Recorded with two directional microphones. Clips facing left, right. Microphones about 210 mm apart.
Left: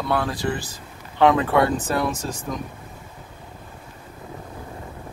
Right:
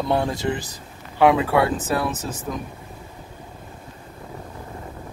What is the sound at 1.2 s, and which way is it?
Speech, 10° right (ahead or behind).